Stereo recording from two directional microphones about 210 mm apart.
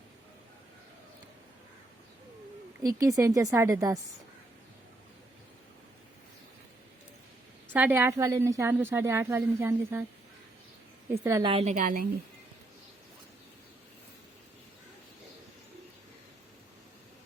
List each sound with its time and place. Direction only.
2.8 s a woman's voice: 15° right (ahead or behind)
7.7 s a woman's voice: 10° right (ahead or behind)
11.1 s a woman's voice: 15° right (ahead or behind)
11.4 s a woman's voice: 30° right (ahead or behind)